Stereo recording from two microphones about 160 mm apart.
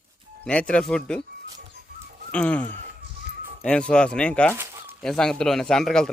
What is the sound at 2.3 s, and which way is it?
Speech, 10° left (ahead or behind).